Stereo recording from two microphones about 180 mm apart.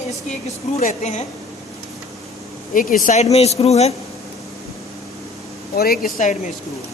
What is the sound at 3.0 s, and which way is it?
Speech, 45° left (ahead or behind).